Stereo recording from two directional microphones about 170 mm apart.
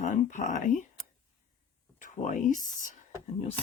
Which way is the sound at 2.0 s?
45° left (ahead or behind).